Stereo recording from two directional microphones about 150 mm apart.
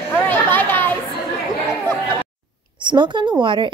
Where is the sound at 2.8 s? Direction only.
30° right (ahead or behind).